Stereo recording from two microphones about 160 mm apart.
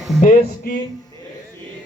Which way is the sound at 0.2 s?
55° left (ahead or behind).